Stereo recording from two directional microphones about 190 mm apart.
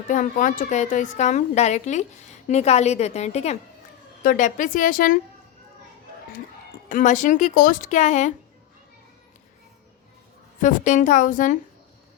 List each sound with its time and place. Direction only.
0.1 s a woman's voice: 45° left (ahead or behind)
6.8 s a woman's voice: 40° left (ahead or behind)
10.6 s a woman's voice: 40° left (ahead or behind)